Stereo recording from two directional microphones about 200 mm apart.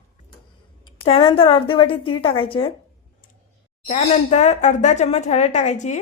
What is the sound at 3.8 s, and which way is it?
Speech, 35° left (ahead or behind).